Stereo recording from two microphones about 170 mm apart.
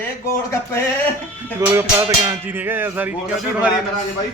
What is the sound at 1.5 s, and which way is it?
Speech, 15° right (ahead or behind).